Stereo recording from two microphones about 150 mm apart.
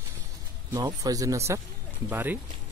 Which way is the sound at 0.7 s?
25° right (ahead or behind).